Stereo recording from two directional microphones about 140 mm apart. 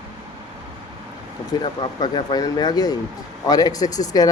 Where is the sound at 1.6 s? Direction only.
30° left (ahead or behind).